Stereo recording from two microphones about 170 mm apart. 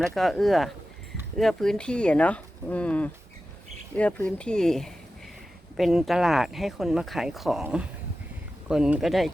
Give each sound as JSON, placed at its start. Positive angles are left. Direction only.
{"t": 0.0, "sound": "speech", "side_deg": 0}
{"t": 4.3, "sound": "speech", "side_deg": 5}